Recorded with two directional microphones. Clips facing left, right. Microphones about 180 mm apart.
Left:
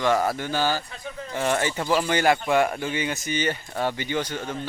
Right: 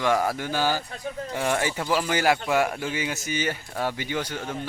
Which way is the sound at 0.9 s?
45° right (ahead or behind).